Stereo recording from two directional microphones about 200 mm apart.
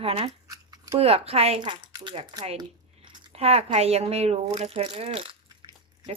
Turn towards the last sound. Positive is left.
turn(degrees=-25)  # may be behind; listen again after turning